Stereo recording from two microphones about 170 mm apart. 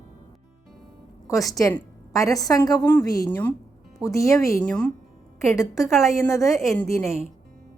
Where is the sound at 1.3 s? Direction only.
20° left (ahead or behind).